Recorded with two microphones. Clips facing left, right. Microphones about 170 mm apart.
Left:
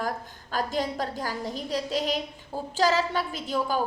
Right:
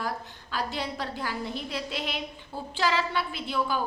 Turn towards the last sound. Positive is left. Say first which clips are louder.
# left 1 dB
turn(degrees=40)  # may be behind; listen again after turning